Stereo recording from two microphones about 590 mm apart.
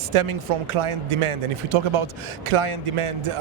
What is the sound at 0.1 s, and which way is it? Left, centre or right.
A man's voice, right.